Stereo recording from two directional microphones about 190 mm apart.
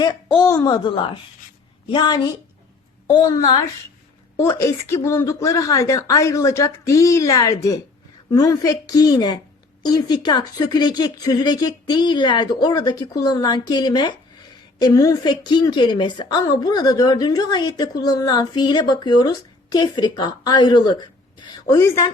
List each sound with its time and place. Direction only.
0.3 s a woman's voice: 15° left (ahead or behind)